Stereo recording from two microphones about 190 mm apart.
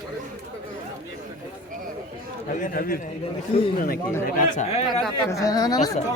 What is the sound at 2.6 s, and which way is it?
Speech, 45° left (ahead or behind).